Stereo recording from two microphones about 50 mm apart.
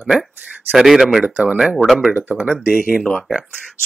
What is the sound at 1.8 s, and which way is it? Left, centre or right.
Speech, centre.